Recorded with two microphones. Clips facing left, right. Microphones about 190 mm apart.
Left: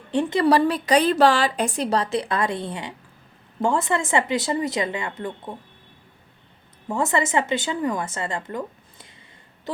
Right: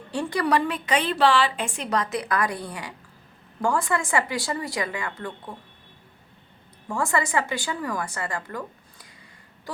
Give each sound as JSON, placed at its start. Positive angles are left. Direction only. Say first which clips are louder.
{"t": 0.1, "sound": "a woman's voice", "louder": "left 5 dB", "side_deg": 20}
{"t": 6.8, "sound": "a woman's voice", "louder": "left 3 dB", "side_deg": 20}